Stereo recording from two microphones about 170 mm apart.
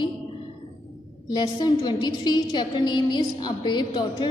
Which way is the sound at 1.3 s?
25° left (ahead or behind).